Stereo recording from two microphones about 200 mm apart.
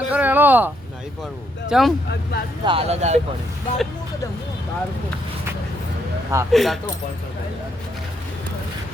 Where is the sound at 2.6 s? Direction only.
30° right (ahead or behind).